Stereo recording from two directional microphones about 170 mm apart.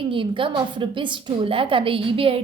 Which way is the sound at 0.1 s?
30° right (ahead or behind).